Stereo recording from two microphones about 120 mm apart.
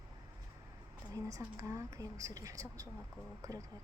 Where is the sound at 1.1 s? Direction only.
25° right (ahead or behind).